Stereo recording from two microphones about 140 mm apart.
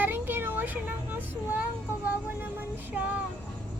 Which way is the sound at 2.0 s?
15° right (ahead or behind).